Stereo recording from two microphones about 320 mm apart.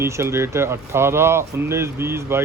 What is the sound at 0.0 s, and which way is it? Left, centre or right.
Speech, centre.